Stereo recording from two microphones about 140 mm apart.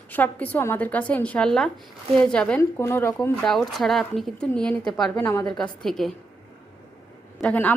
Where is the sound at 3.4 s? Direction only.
5° left (ahead or behind).